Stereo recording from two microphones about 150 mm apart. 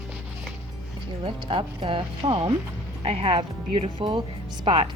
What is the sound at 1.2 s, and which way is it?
A woman's voice, 35° right (ahead or behind).